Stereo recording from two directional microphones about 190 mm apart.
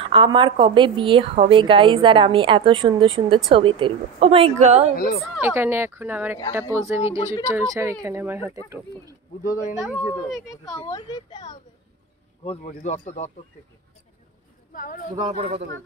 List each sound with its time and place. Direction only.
0.0 s a woman's voice: 25° right (ahead or behind)
4.9 s speech: 50° left (ahead or behind)
5.4 s speech: 10° right (ahead or behind)
9.4 s speech: 45° left (ahead or behind)
9.8 s speech: 5° right (ahead or behind)
10.9 s speech: 20° left (ahead or behind)
12.4 s speech: 35° left (ahead or behind)
14.7 s speech: 45° left (ahead or behind)
15.3 s a woman's voice: 35° right (ahead or behind)